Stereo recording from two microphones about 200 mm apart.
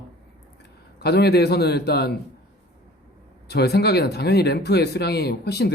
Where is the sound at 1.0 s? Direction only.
55° left (ahead or behind).